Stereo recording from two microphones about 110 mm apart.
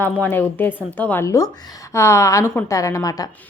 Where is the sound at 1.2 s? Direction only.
30° left (ahead or behind).